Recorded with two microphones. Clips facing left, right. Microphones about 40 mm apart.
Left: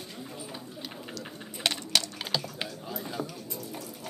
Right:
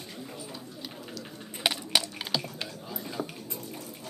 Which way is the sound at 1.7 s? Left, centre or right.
Centre.